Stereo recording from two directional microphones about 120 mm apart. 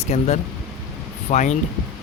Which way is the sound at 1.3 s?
85° left.